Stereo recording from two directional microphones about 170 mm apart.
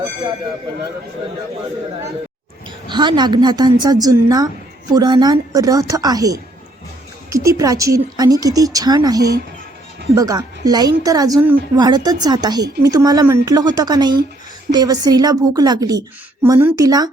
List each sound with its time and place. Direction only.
2.9 s a woman's voice: 25° right (ahead or behind)
16.6 s speech: 10° right (ahead or behind)
16.8 s a woman's voice: 20° right (ahead or behind)